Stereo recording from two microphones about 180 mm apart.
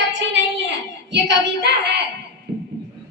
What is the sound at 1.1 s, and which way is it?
Child singing, 75° right (ahead or behind).